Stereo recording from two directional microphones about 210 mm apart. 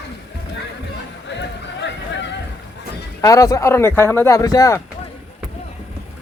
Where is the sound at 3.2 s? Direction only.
15° left (ahead or behind).